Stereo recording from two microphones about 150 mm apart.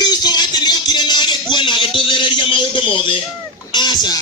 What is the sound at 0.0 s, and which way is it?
Music, 25° left (ahead or behind).